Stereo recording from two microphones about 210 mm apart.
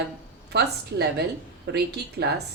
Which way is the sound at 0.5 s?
50° right (ahead or behind).